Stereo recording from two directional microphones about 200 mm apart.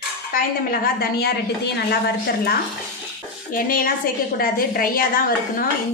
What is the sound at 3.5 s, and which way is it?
A woman's voice, 45° left (ahead or behind).